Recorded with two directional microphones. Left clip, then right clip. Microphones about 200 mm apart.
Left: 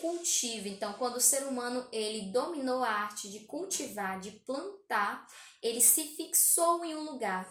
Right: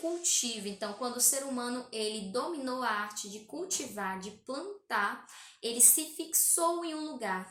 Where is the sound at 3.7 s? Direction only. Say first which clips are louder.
Right 1 dB; 15° right (ahead or behind).